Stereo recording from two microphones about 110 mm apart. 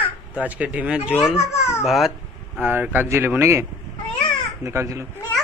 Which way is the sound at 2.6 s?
15° right (ahead or behind).